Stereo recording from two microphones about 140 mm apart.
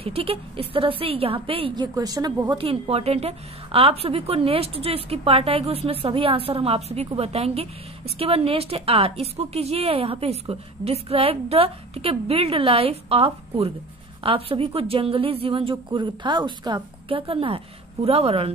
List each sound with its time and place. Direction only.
0.0 s a woman's voice: 45° right (ahead or behind)
2.0 s speech: 30° right (ahead or behind)
2.5 s a woman's voice: 40° right (ahead or behind)